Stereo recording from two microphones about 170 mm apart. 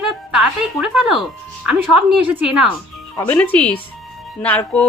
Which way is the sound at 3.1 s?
20° left (ahead or behind).